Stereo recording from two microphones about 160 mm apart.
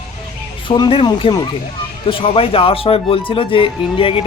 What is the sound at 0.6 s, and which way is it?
Speech, 30° left (ahead or behind).